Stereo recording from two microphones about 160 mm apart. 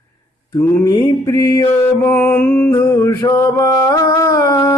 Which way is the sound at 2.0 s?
15° left (ahead or behind).